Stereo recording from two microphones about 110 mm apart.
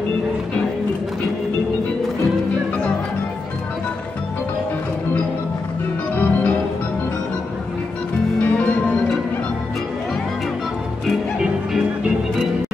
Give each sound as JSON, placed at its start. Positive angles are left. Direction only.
{"t": 6.1, "sound": "organ", "side_deg": 15}
{"t": 8.4, "sound": "music", "side_deg": 10}